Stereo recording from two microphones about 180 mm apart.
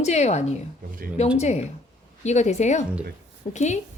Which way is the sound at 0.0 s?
40° left (ahead or behind).